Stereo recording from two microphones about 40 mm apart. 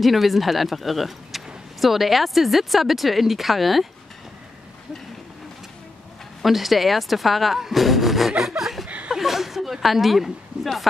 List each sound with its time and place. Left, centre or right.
0.0 s speech: centre
6.4 s speech: centre
8.3 s chuckle: centre
8.8 s chuckle: right
9.1 s a sound: centre
9.9 s speech: centre